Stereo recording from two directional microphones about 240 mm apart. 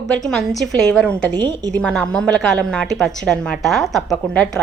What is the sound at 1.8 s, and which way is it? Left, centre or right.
A woman's voice, centre.